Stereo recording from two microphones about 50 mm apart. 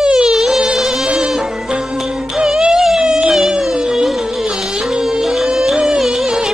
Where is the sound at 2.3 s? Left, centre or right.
Centre.